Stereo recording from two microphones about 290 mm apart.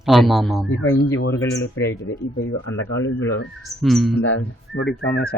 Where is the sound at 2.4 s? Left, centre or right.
Left.